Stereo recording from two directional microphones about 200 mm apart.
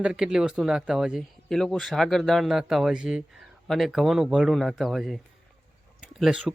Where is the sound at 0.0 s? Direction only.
5° right (ahead or behind).